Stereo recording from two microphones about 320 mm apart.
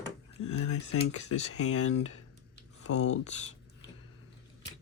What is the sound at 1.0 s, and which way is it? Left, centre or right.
Speech, left.